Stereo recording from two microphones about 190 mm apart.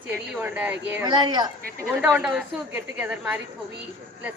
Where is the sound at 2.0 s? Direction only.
5° right (ahead or behind).